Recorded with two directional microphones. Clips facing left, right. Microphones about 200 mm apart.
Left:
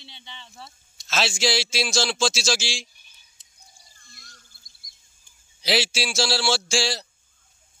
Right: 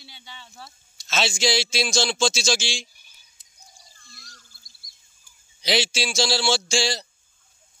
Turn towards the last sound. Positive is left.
turn(degrees=5)  # may be behind; listen again after turning